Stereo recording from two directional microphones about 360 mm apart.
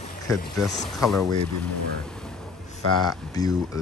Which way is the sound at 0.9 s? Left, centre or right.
Centre.